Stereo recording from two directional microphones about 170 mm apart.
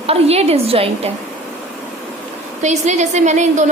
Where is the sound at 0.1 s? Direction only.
35° right (ahead or behind).